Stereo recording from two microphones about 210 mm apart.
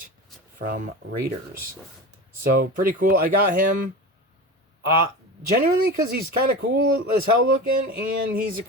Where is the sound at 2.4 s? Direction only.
45° right (ahead or behind).